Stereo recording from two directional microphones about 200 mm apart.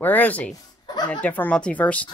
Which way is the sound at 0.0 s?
10° left (ahead or behind).